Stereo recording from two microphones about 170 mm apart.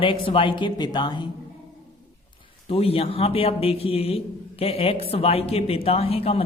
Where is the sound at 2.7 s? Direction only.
35° left (ahead or behind).